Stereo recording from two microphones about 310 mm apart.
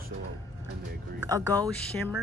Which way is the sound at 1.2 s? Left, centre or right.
Centre.